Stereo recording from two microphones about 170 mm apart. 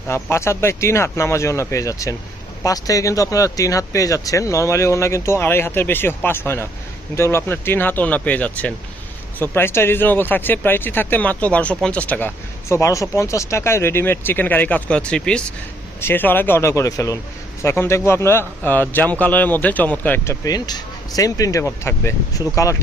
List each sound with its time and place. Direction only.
0.1 s speech: 15° left (ahead or behind)